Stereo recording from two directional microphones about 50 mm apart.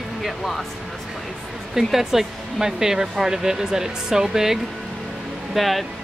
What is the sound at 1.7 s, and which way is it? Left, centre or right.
Speech, centre.